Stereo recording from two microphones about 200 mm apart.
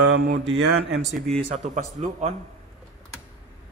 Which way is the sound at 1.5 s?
35° right (ahead or behind).